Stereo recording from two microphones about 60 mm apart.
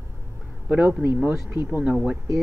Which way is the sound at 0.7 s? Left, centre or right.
Right.